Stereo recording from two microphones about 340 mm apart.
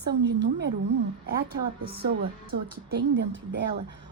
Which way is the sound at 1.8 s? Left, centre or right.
Right.